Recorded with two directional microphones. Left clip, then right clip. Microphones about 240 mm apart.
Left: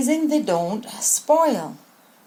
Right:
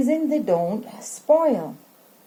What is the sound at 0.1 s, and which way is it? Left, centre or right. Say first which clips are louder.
A woman's voice: left 3 dB; left.